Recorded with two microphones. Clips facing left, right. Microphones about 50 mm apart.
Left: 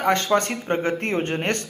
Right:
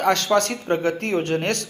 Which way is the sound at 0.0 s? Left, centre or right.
Left.